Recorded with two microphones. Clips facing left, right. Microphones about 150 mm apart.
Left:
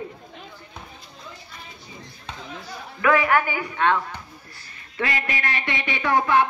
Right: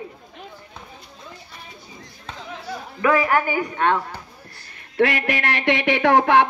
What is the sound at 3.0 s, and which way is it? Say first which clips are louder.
Speech: right 1 dB; 35° right (ahead or behind).